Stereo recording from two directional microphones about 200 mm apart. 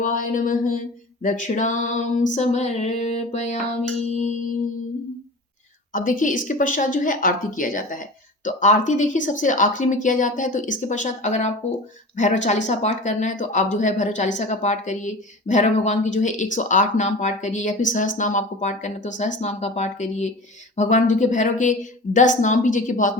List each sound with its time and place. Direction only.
0.0 s speech: 40° left (ahead or behind)
5.9 s speech: 40° left (ahead or behind)